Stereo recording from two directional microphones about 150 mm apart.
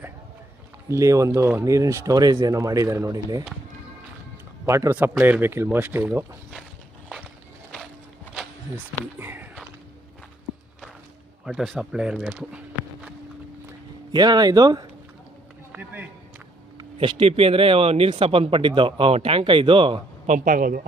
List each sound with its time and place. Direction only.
0.9 s speech: 20° right (ahead or behind)
4.6 s speech: 20° right (ahead or behind)
9.1 s speech: 15° right (ahead or behind)
11.4 s speech: centre (ahead or behind)
14.1 s speech: 30° right (ahead or behind)
15.7 s speech: 10° right (ahead or behind)
16.7 s speech: 35° right (ahead or behind)
20.2 s speech: 60° right (ahead or behind)